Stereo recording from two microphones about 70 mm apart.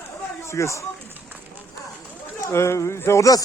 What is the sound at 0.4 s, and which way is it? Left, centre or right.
Speech, left.